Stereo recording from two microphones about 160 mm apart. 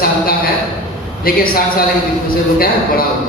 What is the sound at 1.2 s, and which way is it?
Speech, 65° left (ahead or behind).